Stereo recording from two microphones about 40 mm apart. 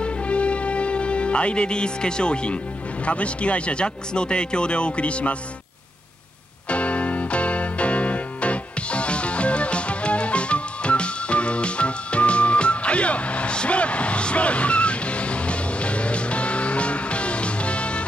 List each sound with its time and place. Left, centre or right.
0.0 s music: left
3.1 s speech: left
6.7 s music: left